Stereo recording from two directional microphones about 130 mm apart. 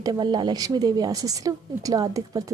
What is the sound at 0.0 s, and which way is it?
A woman's voice, 35° right (ahead or behind).